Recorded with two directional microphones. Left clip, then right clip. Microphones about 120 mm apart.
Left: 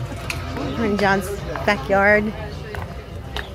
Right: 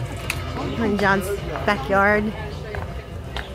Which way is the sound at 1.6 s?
10° left (ahead or behind).